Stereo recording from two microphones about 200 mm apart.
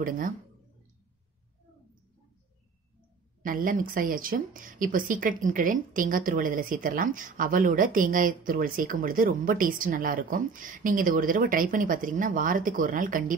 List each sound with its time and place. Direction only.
3.4 s speech: 45° right (ahead or behind)